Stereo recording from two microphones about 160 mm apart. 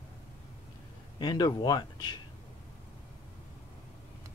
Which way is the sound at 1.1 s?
25° left (ahead or behind).